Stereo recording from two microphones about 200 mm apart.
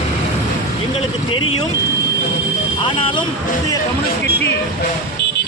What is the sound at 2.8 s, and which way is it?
Speech, 25° left (ahead or behind).